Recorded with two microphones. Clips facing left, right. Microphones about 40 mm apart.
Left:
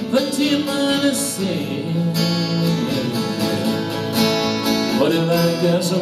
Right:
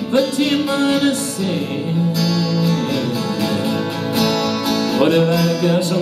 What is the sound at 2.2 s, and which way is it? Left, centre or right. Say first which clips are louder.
Music: right 1 dB; centre.